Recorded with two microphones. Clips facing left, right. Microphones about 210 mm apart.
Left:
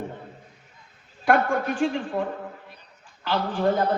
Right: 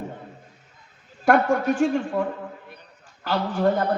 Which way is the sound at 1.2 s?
45° right (ahead or behind).